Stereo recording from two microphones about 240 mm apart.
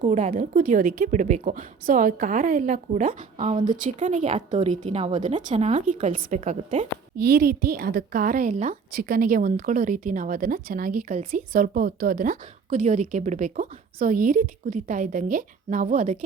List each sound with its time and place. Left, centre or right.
0.0 s a woman's voice: right